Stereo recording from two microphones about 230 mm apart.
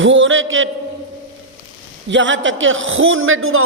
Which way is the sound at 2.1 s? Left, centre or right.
Right.